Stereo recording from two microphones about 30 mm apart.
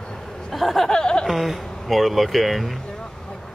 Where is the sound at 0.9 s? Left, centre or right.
Left.